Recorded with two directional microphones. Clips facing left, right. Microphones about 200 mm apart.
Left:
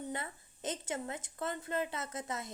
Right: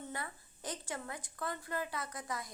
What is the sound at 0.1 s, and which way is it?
A woman's voice, 20° left (ahead or behind).